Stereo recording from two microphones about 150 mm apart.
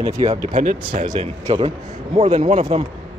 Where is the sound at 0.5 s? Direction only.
60° right (ahead or behind).